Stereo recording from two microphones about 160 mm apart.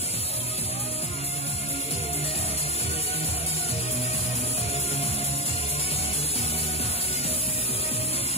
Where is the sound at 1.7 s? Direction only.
40° left (ahead or behind).